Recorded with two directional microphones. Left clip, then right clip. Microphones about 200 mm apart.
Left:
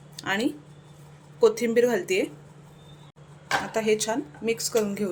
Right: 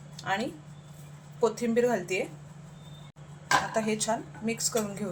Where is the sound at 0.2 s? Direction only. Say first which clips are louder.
Left 4 dB; 50° left (ahead or behind).